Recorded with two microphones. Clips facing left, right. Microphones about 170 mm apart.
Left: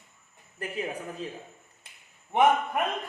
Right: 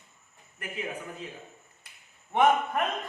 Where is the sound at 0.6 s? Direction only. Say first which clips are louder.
Left 4 dB; 35° left (ahead or behind).